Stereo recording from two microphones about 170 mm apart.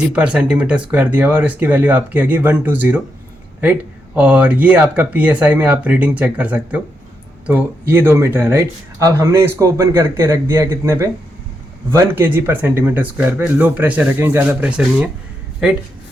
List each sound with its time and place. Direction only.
0.1 s speech: 5° right (ahead or behind)